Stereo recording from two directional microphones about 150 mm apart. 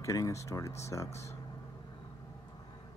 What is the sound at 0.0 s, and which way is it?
Speech, 20° left (ahead or behind).